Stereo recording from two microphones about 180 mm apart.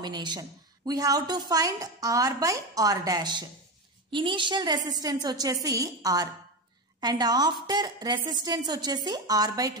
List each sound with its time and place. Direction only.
0.0 s a woman's voice: 25° right (ahead or behind)